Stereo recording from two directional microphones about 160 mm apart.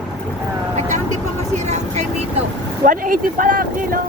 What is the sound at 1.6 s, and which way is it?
Vehicle, 45° right (ahead or behind).